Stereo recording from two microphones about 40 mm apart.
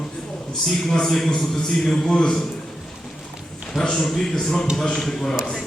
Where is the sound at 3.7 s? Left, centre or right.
Centre.